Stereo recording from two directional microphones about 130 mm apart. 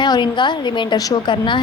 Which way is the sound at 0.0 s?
35° left (ahead or behind).